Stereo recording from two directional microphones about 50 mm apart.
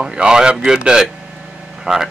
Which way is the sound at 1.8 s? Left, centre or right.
Centre.